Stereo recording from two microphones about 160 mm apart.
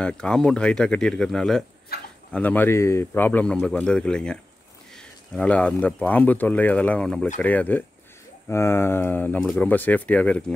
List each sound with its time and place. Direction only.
0.0 s speech: 5° left (ahead or behind)
1.9 s speech: 75° left (ahead or behind)
2.3 s speech: 10° left (ahead or behind)